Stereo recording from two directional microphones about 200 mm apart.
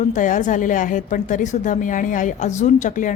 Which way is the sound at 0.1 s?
40° left (ahead or behind).